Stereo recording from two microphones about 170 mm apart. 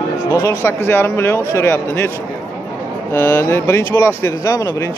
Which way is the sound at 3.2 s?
15° left (ahead or behind).